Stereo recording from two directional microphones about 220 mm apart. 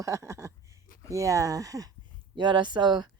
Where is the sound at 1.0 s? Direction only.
15° right (ahead or behind).